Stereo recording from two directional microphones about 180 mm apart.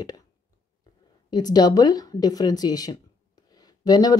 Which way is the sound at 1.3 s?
20° left (ahead or behind).